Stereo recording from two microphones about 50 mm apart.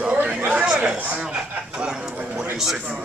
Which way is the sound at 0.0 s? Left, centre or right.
Right.